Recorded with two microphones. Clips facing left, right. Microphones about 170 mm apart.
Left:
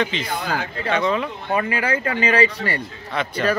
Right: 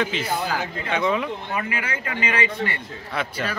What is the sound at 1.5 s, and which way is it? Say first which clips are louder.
A man's voice: left 6 dB; 35° left (ahead or behind).